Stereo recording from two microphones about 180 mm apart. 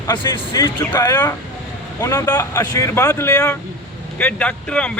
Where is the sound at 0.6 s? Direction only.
20° left (ahead or behind).